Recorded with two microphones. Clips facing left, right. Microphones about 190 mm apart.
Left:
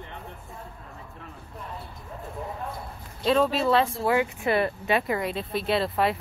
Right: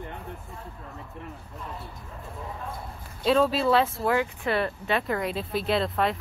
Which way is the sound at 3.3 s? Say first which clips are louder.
Even; centre (ahead or behind).